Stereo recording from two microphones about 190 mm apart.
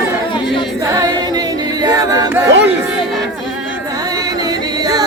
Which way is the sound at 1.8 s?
20° right (ahead or behind).